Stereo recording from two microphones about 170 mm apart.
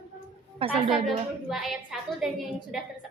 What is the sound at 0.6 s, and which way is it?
Speech, 30° right (ahead or behind).